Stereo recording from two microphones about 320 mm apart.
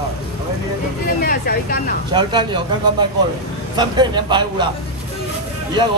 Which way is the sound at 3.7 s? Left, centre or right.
Centre.